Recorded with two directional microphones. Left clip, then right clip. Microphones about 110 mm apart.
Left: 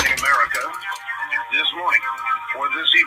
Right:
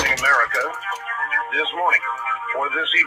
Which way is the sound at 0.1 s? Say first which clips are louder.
Right 1 dB; 20° right (ahead or behind).